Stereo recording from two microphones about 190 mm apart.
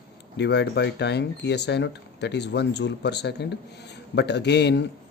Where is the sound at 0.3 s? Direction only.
65° left (ahead or behind).